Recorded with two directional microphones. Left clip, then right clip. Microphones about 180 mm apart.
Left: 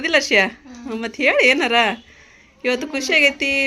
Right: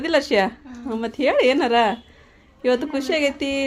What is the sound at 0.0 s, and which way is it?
Speech, 15° right (ahead or behind).